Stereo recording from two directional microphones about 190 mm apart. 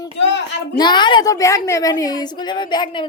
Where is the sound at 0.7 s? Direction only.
25° left (ahead or behind).